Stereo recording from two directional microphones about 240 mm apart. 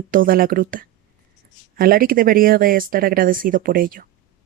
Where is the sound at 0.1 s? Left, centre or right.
Right.